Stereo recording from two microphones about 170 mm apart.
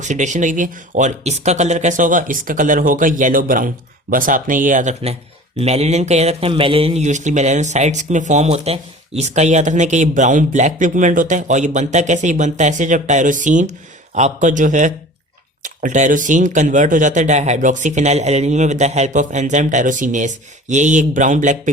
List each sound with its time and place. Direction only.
0.0 s a man's voice: 45° right (ahead or behind)